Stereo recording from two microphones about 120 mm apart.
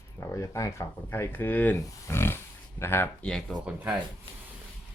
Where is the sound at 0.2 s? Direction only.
25° left (ahead or behind).